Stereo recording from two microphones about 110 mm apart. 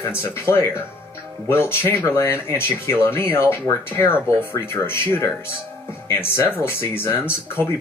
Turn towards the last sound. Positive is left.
turn(degrees=20)  # may be behind; listen again after turning